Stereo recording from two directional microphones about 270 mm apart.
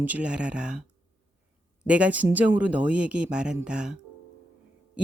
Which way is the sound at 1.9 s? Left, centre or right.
Centre.